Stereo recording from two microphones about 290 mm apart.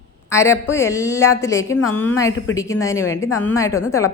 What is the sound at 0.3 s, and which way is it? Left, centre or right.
A woman's voice, centre.